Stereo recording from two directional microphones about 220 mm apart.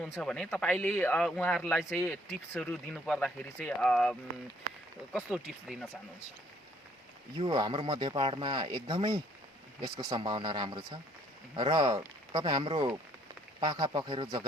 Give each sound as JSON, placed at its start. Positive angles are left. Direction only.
{"t": 0.0, "sound": "speech", "side_deg": 5}
{"t": 7.3, "sound": "speech", "side_deg": -20}